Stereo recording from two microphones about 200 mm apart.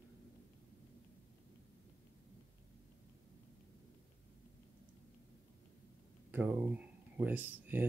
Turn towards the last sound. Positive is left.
turn(degrees=-10)  # may be behind; listen again after turning